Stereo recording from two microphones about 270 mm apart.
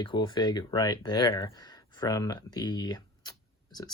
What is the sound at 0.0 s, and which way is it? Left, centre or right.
Speech, centre.